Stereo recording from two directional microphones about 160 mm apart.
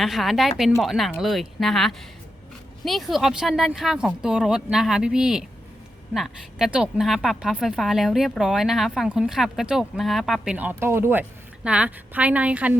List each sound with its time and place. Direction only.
0.0 s a woman's voice: centre (ahead or behind)